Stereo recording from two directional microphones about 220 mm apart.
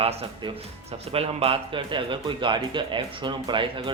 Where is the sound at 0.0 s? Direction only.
25° right (ahead or behind).